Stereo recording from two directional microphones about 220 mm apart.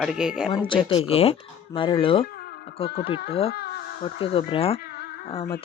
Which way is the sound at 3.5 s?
45° left (ahead or behind).